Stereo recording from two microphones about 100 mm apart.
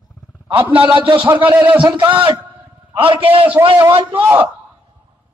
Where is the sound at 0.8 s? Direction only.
55° right (ahead or behind).